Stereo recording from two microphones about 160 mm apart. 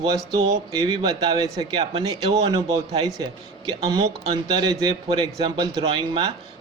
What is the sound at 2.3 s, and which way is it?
A man's voice, 25° right (ahead or behind).